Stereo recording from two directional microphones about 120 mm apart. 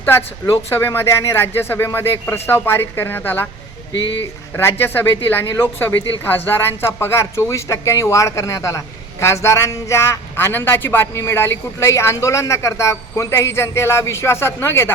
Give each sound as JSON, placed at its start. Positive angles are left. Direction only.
{"t": 0.0, "sound": "a man's voice", "side_deg": 20}
{"t": 4.5, "sound": "a man's voice", "side_deg": 20}